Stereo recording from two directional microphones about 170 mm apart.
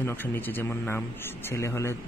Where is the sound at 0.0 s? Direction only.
10° left (ahead or behind).